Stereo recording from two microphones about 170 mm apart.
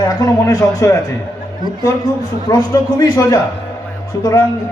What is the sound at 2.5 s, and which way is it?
A man's voice, 20° left (ahead or behind).